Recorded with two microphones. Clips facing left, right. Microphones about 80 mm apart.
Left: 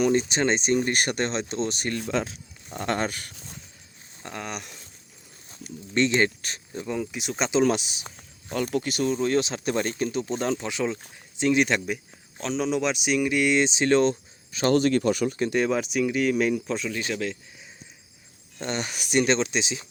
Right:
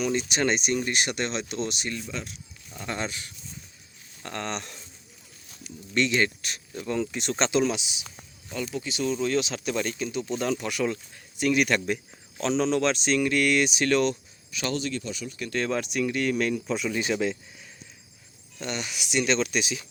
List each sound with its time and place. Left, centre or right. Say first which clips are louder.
0.0 s speech: left 4 dB; left
2.0 s speech: left 8 dB; left
2.7 s speech: left 5 dB; left
3.3 s a sound: left 1 dB; left
4.2 s speech: right 2 dB; centre
5.9 s speech: left 2 dB; left
6.8 s speech: right 2 dB; centre
7.6 s speech: left 4 dB; left
8.4 s speech: left 5 dB; left
12.4 s speech: right 2 dB; centre; by 15.4 s left
15.5 s speech: even; centre
16.6 s speech: right 2 dB; centre
18.6 s speech: left 3 dB; left